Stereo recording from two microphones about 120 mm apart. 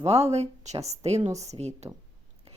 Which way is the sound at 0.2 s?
65° right (ahead or behind).